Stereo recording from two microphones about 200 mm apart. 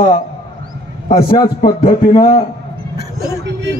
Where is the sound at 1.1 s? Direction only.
20° left (ahead or behind).